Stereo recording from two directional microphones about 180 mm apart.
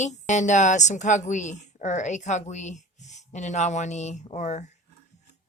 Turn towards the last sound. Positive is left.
turn(degrees=40)  # may be behind; listen again after turning